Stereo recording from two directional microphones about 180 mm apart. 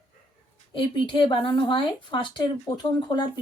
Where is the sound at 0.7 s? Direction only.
25° left (ahead or behind).